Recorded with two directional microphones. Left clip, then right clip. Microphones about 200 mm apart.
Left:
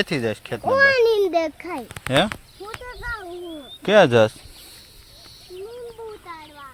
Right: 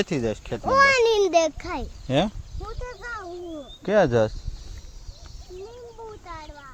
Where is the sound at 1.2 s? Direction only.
30° right (ahead or behind).